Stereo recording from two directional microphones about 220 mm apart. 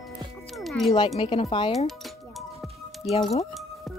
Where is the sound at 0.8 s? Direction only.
25° left (ahead or behind).